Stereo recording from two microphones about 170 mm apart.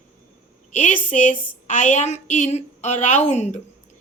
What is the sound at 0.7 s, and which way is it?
A woman's voice, 45° left (ahead or behind).